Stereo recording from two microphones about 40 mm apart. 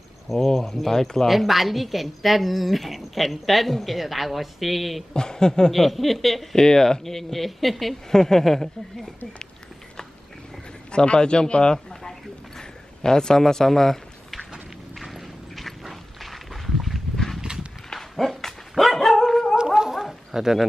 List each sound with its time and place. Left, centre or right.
0.6 s speech: centre
1.2 s a woman's voice: centre
5.1 s speech: centre
5.7 s a woman's voice: centre
6.5 s speech: centre
10.9 s a sound: left
13.4 s a man's voice: centre
15.0 s a sound: centre
17.8 s dog: centre
19.5 s dog: centre